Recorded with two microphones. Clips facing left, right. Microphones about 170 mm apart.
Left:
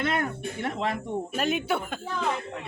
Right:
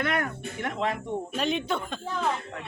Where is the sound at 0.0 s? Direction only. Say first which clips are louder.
Left 1 dB; 25° left (ahead or behind).